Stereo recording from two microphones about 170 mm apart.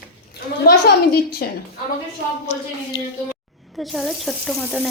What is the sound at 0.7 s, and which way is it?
Speech, 70° left (ahead or behind).